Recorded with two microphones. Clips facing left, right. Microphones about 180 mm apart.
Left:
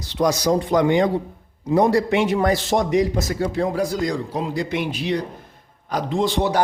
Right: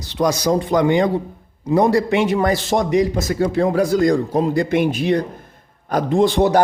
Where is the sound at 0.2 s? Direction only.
70° right (ahead or behind).